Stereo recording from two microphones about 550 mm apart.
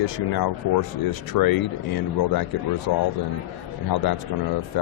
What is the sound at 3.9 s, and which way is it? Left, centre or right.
Speech, left.